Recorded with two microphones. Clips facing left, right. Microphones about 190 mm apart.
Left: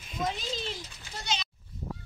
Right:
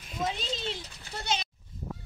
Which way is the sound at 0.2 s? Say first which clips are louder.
Even; 5° right (ahead or behind).